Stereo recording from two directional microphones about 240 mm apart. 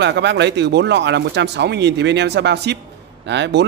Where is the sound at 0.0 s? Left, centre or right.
Right.